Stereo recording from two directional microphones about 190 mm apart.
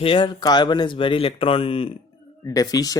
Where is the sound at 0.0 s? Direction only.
25° left (ahead or behind).